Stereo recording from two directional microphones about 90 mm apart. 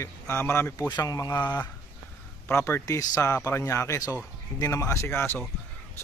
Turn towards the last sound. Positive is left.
turn(degrees=20)  # may be behind; listen again after turning